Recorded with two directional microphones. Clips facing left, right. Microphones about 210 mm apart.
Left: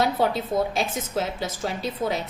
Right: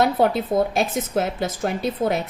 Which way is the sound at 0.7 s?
55° right (ahead or behind).